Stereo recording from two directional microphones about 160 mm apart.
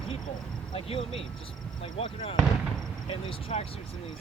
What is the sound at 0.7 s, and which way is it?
Speech, 35° left (ahead or behind).